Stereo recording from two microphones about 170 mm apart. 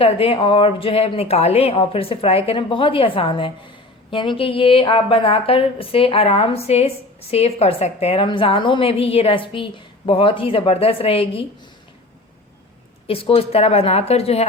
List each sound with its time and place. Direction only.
0.0 s a woman's voice: 35° left (ahead or behind)
13.1 s a woman's voice: 35° left (ahead or behind)